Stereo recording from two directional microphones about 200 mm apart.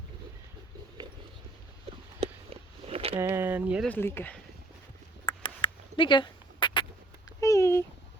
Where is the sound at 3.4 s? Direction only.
10° right (ahead or behind).